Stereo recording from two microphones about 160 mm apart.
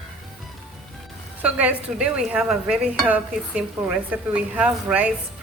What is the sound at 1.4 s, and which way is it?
Dishes, 10° right (ahead or behind).